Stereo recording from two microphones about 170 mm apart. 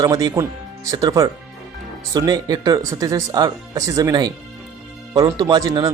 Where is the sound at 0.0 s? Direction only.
25° right (ahead or behind).